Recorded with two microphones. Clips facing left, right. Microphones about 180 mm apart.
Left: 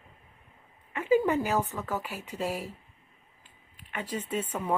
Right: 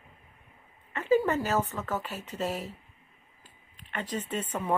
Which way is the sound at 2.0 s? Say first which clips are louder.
Even; 10° left (ahead or behind).